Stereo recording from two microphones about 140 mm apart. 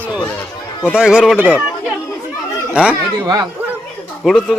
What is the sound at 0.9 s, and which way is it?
Speech, 5° right (ahead or behind).